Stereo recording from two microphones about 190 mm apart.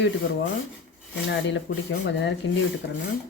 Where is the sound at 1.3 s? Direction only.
65° left (ahead or behind).